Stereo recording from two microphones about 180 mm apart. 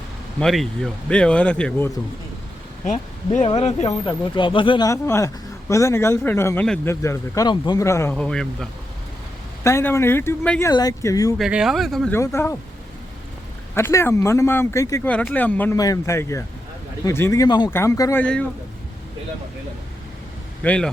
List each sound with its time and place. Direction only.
0.3 s speech: centre (ahead or behind)
2.8 s speech: 40° left (ahead or behind)
4.9 s speech: 15° left (ahead or behind)
8.1 s speech: 5° left (ahead or behind)
9.6 s speech: 15° left (ahead or behind)
10.7 s speech: 20° left (ahead or behind)
11.3 s speech: 5° right (ahead or behind)
12.1 s speech: 15° left (ahead or behind)
13.7 s speech: 15° left (ahead or behind)
18.2 s speech: 5° left (ahead or behind)
20.6 s speech: 5° left (ahead or behind)